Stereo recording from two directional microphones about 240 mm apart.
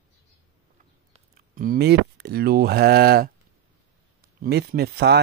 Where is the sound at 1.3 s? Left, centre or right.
Right.